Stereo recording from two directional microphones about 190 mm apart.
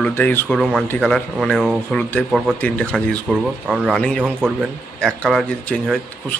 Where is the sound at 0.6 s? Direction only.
Centre (ahead or behind).